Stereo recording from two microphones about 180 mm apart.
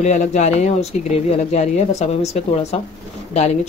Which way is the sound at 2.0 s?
35° left (ahead or behind).